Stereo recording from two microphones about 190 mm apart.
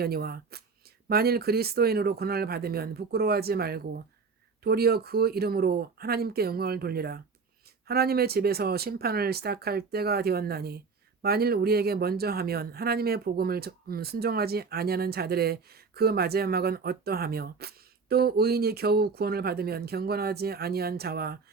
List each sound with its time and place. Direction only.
0.0 s speech: 55° right (ahead or behind)